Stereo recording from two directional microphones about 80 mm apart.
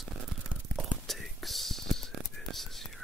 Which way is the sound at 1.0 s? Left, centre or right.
Centre.